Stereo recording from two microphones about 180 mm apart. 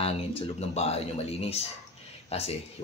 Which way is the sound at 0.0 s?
35° left (ahead or behind).